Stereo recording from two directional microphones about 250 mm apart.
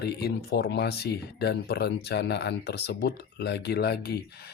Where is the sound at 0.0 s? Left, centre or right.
Left.